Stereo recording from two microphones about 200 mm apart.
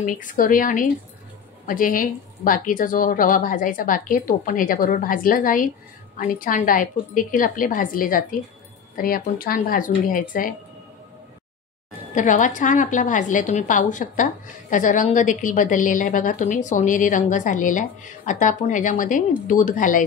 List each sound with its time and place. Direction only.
0.0 s a woman's voice: 40° left (ahead or behind)
12.2 s a woman's voice: 40° left (ahead or behind)